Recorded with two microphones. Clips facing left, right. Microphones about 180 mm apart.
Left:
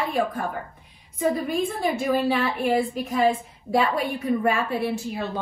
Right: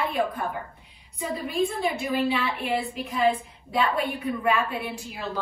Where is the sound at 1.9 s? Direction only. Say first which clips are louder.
Left 3 dB; 50° left (ahead or behind).